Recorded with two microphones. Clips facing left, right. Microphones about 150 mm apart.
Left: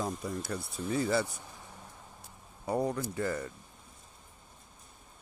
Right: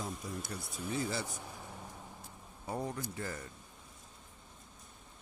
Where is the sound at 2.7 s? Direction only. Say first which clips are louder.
Left 8 dB; 70° left (ahead or behind).